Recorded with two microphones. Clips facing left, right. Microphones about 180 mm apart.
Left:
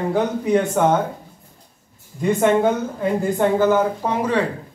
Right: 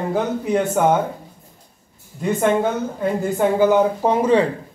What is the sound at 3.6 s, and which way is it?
Speech, 20° right (ahead or behind).